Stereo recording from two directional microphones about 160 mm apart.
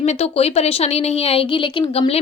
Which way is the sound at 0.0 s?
40° left (ahead or behind).